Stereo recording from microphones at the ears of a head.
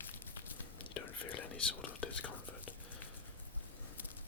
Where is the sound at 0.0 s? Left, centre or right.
Left.